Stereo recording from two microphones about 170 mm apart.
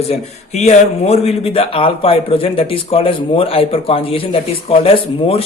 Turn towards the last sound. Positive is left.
turn(degrees=35)  # may be behind; listen again after turning